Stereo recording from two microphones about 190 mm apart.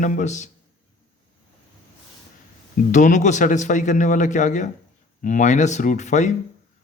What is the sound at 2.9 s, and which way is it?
A man's voice, 40° left (ahead or behind).